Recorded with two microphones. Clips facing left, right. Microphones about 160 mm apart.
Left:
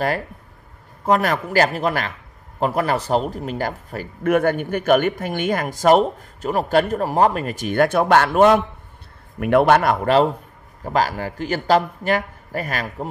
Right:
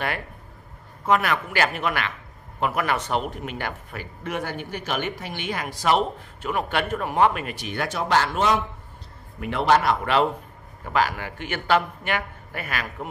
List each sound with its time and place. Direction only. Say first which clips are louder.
1.0 s a man's voice: left 3 dB; 40° left (ahead or behind)